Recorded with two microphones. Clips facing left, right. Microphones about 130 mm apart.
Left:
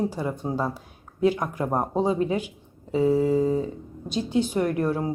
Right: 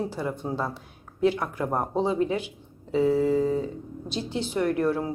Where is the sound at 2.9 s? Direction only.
15° left (ahead or behind).